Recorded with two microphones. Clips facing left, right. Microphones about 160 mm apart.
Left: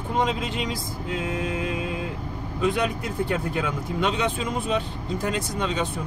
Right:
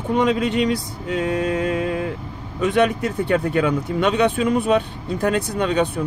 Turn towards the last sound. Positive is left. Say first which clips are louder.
# right 7 dB
turn(degrees=-60)  # may be behind; listen again after turning